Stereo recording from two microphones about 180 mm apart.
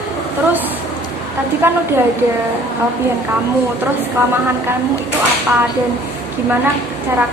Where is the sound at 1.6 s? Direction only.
10° right (ahead or behind).